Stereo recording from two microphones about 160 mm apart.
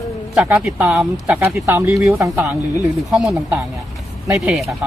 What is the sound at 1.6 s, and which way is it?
Speech, 15° right (ahead or behind).